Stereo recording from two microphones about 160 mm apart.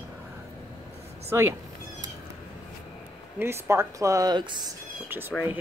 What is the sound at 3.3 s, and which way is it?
Speech, 15° right (ahead or behind).